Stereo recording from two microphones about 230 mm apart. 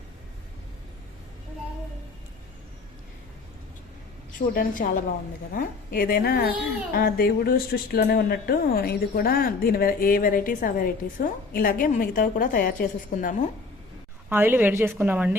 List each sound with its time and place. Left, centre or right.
4.4 s speech: left
14.3 s a woman's voice: centre